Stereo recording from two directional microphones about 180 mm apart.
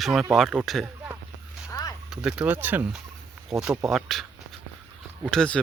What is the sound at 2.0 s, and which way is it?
Speech, 5° right (ahead or behind).